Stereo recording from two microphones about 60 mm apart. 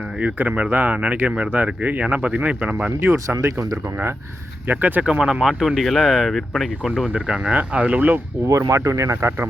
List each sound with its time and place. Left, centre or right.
0.2 s speech: right
3.2 s speech: right
4.6 s speech: right
5.0 s speech: centre
7.1 s speech: centre
7.5 s speech: right
8.4 s speech: right